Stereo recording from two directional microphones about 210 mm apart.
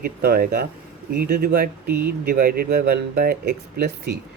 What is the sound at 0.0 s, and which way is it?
Speech, 45° right (ahead or behind).